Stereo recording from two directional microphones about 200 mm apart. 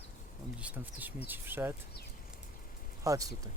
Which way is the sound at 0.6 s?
10° right (ahead or behind).